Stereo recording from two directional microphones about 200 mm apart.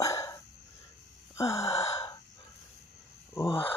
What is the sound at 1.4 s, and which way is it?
Gasp, 15° left (ahead or behind).